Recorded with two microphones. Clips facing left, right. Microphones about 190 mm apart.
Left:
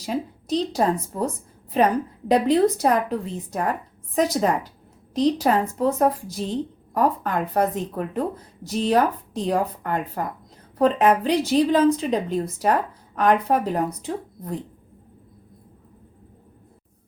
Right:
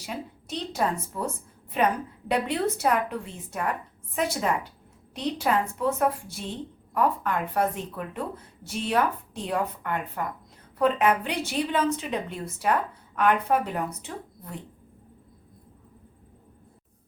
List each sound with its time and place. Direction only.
0.0 s speech: 35° left (ahead or behind)